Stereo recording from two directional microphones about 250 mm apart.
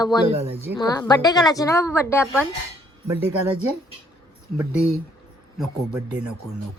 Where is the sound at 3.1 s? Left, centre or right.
Centre.